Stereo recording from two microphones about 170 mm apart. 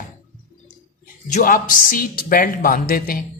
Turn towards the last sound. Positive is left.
turn(degrees=60)  # may be behind; listen again after turning